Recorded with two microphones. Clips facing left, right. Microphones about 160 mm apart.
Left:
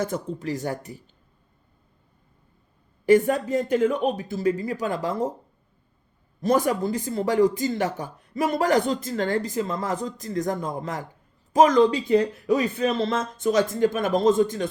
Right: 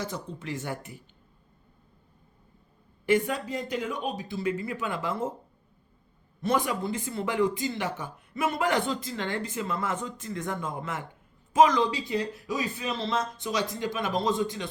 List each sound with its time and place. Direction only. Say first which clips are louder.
0.0 s speech: left 8 dB; 45° left (ahead or behind)
3.1 s speech: left 7 dB; 45° left (ahead or behind)
6.4 s speech: left 6 dB; 40° left (ahead or behind)